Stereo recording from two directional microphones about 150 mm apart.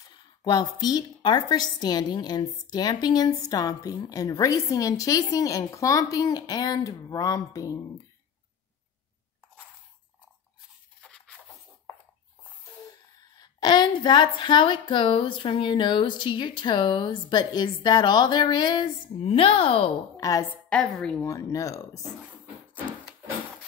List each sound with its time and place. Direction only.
0.1 s a woman's voice: 30° left (ahead or behind)
11.0 s a sound: 5° left (ahead or behind)
13.2 s a woman's voice: 25° left (ahead or behind)
20.2 s a woman's voice: 25° left (ahead or behind)
20.7 s a woman's voice: 5° left (ahead or behind)
21.3 s a woman's voice: 20° left (ahead or behind)